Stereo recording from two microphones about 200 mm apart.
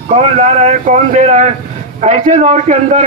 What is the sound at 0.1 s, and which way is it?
A man's voice, 35° right (ahead or behind).